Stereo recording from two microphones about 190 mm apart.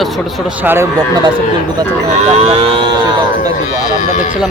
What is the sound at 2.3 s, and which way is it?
Speech, 35° right (ahead or behind).